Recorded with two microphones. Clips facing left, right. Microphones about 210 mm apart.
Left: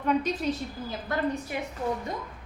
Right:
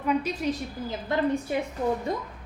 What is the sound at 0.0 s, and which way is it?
Speech, 10° right (ahead or behind).